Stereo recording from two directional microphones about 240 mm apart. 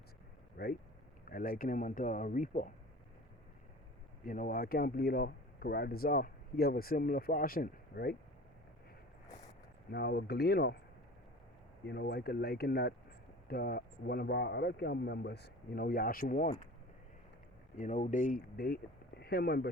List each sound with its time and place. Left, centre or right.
0.5 s speech: left
4.3 s speech: left
9.9 s speech: left
11.9 s speech: left
17.7 s speech: left